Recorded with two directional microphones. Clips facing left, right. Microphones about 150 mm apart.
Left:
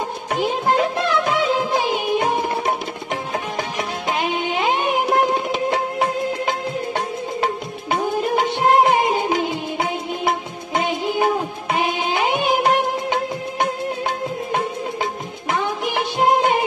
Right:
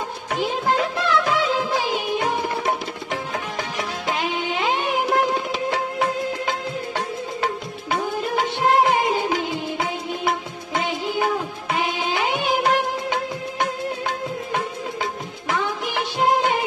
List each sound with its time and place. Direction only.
0.4 s music: 20° left (ahead or behind)
4.1 s music: 15° left (ahead or behind)
7.4 s music of bollywood: 20° left (ahead or behind)
15.5 s music: 20° left (ahead or behind)